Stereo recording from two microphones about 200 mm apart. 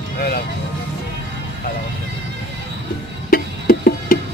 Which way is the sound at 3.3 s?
50° left (ahead or behind).